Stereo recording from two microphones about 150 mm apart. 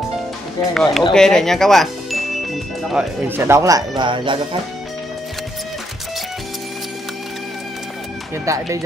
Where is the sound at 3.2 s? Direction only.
15° right (ahead or behind).